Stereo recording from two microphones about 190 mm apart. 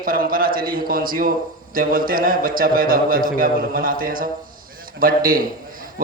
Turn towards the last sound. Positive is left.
turn(degrees=-50)  # may be behind; listen again after turning